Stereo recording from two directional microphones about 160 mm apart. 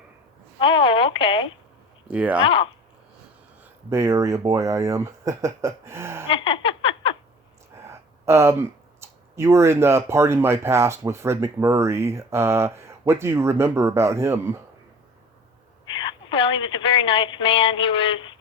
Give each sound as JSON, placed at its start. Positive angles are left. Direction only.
{"t": 0.6, "sound": "speech", "side_deg": 30}
{"t": 2.0, "sound": "speech", "side_deg": -10}
{"t": 3.8, "sound": "speech", "side_deg": -15}
{"t": 6.2, "sound": "a sound", "side_deg": 30}
{"t": 7.8, "sound": "speech", "side_deg": -15}
{"t": 15.9, "sound": "a woman's voice", "side_deg": 30}